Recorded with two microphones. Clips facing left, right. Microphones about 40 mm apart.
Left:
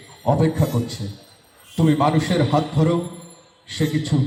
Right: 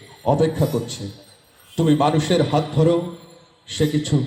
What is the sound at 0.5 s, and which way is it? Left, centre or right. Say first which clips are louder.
Speech: right 1 dB; left.